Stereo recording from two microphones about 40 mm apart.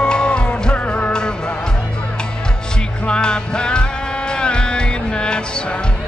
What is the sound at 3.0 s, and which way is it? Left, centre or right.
Music, left.